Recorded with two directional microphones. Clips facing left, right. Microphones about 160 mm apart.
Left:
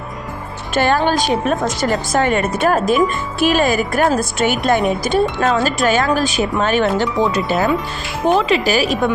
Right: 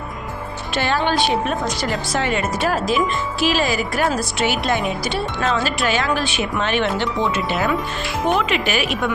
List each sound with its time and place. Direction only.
0.7 s a woman's voice: 50° left (ahead or behind)